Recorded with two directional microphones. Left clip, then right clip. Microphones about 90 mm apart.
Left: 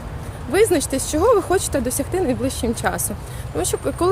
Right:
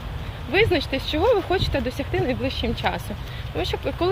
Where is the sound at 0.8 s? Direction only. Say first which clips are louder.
Left 3 dB; 40° left (ahead or behind).